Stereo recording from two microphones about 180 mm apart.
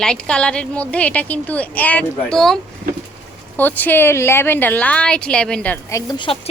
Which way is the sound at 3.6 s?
10° left (ahead or behind).